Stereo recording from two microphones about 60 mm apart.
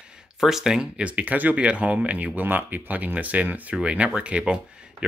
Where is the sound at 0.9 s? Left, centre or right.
Right.